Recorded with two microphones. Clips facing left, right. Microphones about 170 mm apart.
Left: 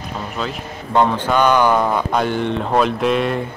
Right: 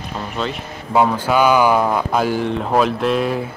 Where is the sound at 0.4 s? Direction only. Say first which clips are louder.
Right 3 dB; centre (ahead or behind).